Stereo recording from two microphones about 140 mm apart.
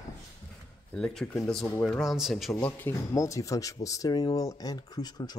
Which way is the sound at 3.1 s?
25° left (ahead or behind).